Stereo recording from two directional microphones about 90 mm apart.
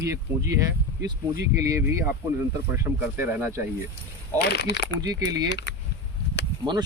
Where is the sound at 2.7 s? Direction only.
30° right (ahead or behind).